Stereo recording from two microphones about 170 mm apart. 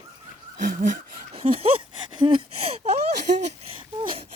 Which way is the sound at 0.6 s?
50° right (ahead or behind).